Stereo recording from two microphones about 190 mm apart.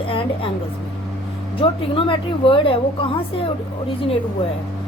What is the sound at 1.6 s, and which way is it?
Speech, 30° left (ahead or behind).